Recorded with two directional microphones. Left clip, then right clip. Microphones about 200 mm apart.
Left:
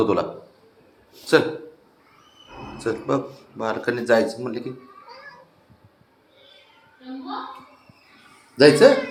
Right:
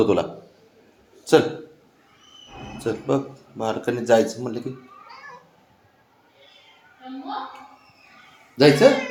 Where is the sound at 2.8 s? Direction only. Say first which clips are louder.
Even; 20° right (ahead or behind).